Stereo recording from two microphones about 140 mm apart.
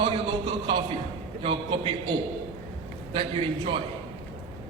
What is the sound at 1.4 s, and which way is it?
Speech, 35° right (ahead or behind).